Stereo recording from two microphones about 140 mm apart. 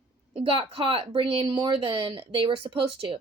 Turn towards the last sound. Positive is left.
turn(degrees=-40)  # may be behind; listen again after turning